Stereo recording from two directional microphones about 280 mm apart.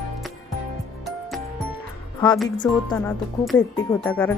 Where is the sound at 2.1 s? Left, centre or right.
Centre.